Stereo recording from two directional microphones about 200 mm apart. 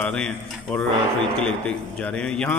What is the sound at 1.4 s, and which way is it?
A man's voice, 5° left (ahead or behind).